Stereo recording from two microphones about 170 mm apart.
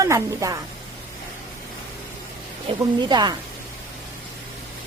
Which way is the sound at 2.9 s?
25° right (ahead or behind).